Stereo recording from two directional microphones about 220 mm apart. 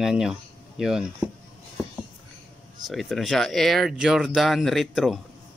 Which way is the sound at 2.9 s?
Centre (ahead or behind).